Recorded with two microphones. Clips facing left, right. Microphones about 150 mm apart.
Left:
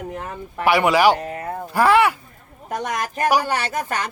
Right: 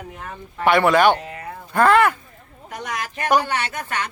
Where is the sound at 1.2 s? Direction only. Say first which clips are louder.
Left 6 dB; 50° left (ahead or behind).